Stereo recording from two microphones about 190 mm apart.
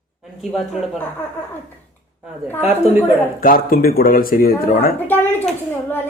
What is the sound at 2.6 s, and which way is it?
Speech, 10° right (ahead or behind).